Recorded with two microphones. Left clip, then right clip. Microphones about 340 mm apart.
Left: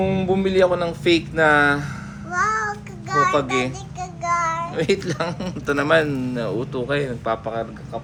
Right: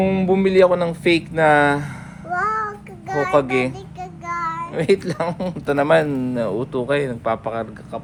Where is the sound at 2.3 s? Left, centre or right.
Centre.